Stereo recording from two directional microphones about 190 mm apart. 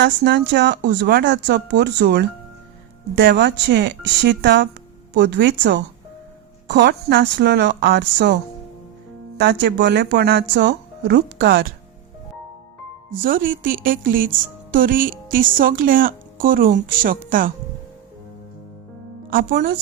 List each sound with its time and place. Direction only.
0.0 s speech: 65° right (ahead or behind)
9.4 s speech: 60° right (ahead or behind)
13.1 s speech: 45° right (ahead or behind)
19.3 s speech: 45° right (ahead or behind)